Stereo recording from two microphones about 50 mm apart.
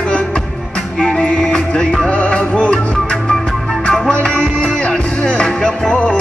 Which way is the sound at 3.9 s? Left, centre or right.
Centre.